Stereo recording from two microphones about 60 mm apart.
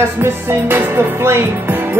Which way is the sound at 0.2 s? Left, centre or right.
Right.